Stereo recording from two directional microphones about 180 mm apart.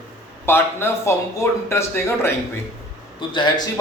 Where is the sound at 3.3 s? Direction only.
25° left (ahead or behind).